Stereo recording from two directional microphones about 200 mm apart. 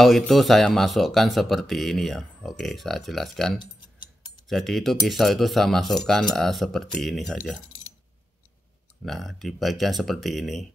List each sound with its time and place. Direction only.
0.0 s speech: centre (ahead or behind)
3.5 s a sound: 25° left (ahead or behind)
4.5 s speech: centre (ahead or behind)
9.0 s speech: centre (ahead or behind)